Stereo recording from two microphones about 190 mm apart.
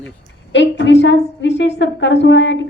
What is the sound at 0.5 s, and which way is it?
A woman's voice, 70° left (ahead or behind).